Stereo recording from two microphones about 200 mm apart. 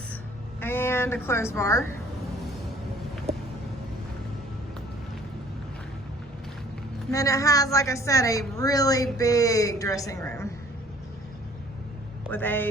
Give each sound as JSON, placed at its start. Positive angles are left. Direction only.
{"t": 0.6, "sound": "speech", "side_deg": 10}
{"t": 7.1, "sound": "a woman's voice", "side_deg": 15}
{"t": 12.3, "sound": "a woman's voice", "side_deg": 10}